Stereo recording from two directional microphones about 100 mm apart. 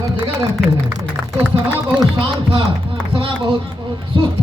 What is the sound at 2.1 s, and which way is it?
A man's voice, 60° right (ahead or behind).